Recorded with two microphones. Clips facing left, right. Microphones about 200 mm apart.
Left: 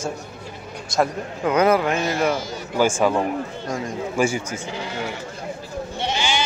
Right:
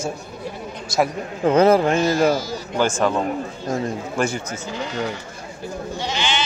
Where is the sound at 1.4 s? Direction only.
30° right (ahead or behind).